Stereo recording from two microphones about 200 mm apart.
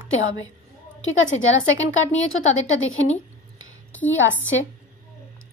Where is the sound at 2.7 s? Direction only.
80° left.